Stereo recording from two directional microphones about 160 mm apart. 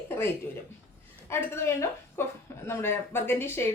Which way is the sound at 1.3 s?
15° left (ahead or behind).